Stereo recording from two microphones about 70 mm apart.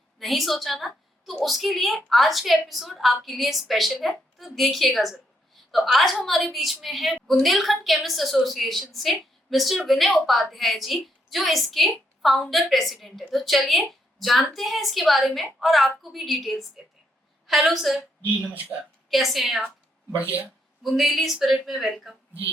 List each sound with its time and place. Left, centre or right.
0.2 s a woman's voice: centre
18.7 s a woman's voice: centre
19.1 s a woman's voice: centre
20.1 s speech: right
20.8 s a woman's voice: centre